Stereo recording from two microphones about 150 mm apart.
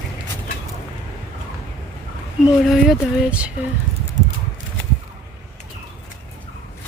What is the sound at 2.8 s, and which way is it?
Speech, 10° right (ahead or behind).